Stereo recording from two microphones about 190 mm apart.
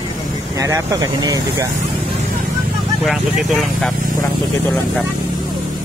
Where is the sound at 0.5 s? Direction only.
15° right (ahead or behind).